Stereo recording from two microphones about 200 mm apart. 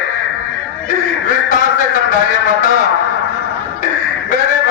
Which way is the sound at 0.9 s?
40° left (ahead or behind).